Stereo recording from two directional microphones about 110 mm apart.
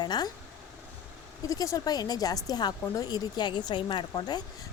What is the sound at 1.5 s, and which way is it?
A woman's voice, 30° left (ahead or behind).